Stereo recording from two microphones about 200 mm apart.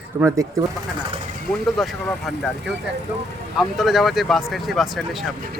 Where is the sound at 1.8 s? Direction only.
Centre (ahead or behind).